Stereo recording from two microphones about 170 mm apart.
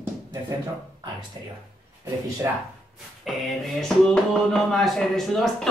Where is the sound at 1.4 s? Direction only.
25° right (ahead or behind).